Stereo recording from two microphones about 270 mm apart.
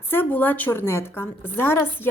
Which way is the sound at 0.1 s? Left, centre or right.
Centre.